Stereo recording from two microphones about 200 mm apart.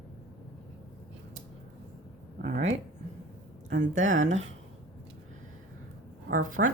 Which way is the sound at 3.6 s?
40° right (ahead or behind).